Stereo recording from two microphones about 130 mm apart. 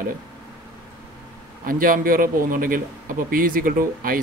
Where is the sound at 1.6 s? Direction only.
90° right.